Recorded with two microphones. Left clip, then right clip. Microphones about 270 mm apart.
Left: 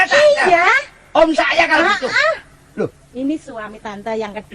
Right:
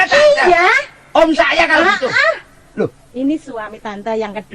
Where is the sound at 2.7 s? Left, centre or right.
Left.